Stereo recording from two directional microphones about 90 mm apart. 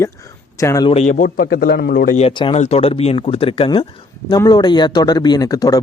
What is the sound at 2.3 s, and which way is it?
Speech, 80° left.